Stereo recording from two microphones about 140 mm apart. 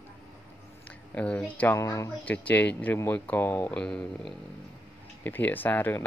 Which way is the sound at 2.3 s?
10° left (ahead or behind).